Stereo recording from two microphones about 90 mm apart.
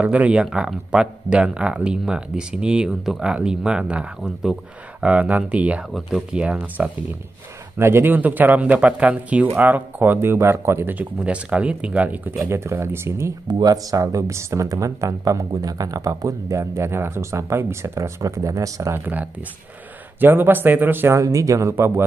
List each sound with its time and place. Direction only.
0.0 s speech: 15° right (ahead or behind)
5.9 s speech: 5° right (ahead or behind)
7.7 s speech: 25° right (ahead or behind)
10.1 s speech: 30° right (ahead or behind)
13.5 s speech: 50° right (ahead or behind)
20.2 s speech: 20° right (ahead or behind)
21.2 s speech: 35° right (ahead or behind)